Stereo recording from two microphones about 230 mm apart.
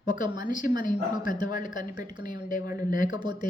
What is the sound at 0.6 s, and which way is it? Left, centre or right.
A woman's voice, left.